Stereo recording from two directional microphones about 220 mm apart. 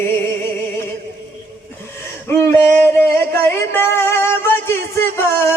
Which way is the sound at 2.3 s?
10° left (ahead or behind).